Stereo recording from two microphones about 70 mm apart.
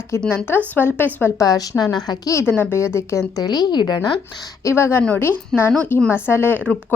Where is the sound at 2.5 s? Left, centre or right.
Left.